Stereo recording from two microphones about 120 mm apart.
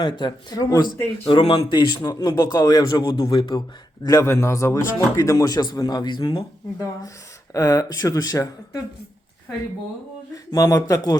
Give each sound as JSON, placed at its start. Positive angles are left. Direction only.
{"t": 0.2, "sound": "a man's voice", "side_deg": 30}
{"t": 10.3, "sound": "speech", "side_deg": 30}